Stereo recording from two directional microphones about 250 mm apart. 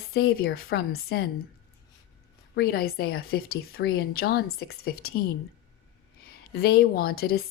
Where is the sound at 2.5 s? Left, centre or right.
Left.